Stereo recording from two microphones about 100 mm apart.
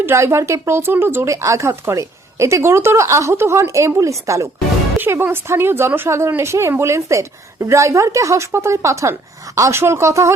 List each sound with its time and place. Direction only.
0.0 s a woman's voice: 25° right (ahead or behind)